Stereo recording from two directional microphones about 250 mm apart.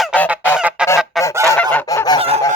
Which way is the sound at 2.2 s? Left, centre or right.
Right.